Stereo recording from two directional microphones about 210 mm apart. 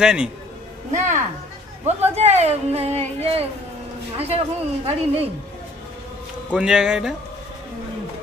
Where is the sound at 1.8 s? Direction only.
30° right (ahead or behind).